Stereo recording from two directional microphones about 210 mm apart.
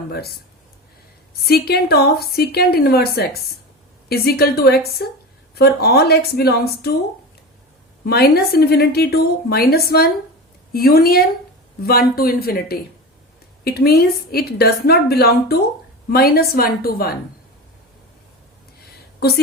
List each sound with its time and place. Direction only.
0.1 s speech: 50° left (ahead or behind)
1.5 s a woman's voice: 50° left (ahead or behind)
8.0 s a woman's voice: 45° left (ahead or behind)